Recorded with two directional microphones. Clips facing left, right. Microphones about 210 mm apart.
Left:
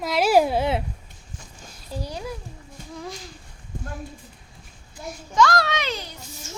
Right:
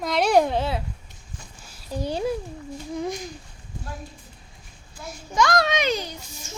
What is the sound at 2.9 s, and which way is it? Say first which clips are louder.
Babbling: right 7 dB; 20° right (ahead or behind).